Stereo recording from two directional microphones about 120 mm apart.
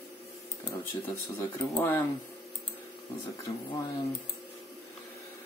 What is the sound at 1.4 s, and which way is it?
Speech, 20° left (ahead or behind).